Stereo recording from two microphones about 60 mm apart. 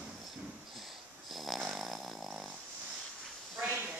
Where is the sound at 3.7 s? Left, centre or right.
Centre.